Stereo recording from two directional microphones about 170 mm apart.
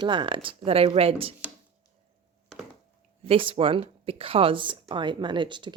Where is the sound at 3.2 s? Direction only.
35° right (ahead or behind).